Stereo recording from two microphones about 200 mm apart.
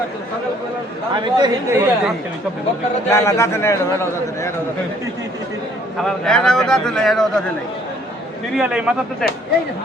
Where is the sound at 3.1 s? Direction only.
15° left (ahead or behind).